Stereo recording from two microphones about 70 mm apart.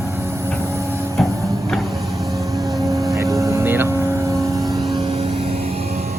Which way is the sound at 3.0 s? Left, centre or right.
Right.